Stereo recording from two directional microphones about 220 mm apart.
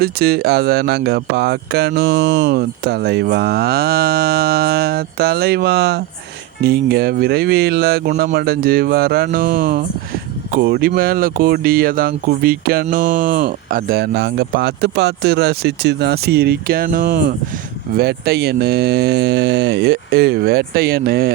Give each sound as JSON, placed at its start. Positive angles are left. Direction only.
{"t": 0.0, "sound": "speech", "side_deg": -45}